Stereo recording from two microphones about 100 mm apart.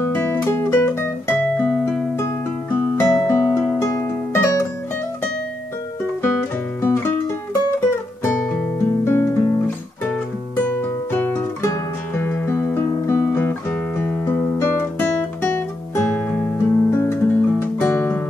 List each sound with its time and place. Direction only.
0.0 s music: 20° left (ahead or behind)
6.8 s music: 25° left (ahead or behind)
9.0 s music: 25° left (ahead or behind)